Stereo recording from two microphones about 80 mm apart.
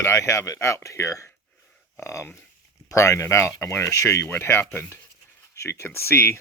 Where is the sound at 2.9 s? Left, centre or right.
Left.